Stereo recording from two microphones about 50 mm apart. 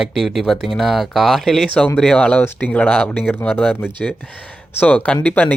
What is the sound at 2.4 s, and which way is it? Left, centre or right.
Speech, left.